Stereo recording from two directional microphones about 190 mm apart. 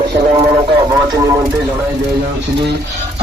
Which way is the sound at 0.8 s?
20° right (ahead or behind).